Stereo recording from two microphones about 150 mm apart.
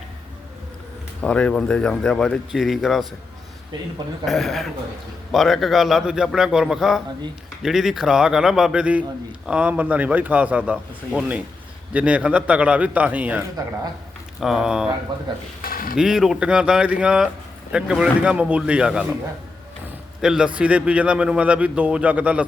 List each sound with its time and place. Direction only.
1.2 s speech: 10° left (ahead or behind)
4.3 s a man's voice: centre (ahead or behind)
14.4 s speech: 5° right (ahead or behind)
15.6 s a sound: 70° left (ahead or behind)
16.0 s a man's voice: 5° right (ahead or behind)
20.2 s a man's voice: 5° right (ahead or behind)